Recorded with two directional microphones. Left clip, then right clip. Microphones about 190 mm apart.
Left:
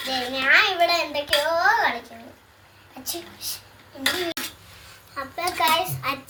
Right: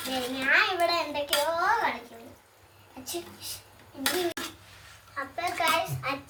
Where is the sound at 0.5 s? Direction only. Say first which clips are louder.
Left 6 dB; 50° left (ahead or behind).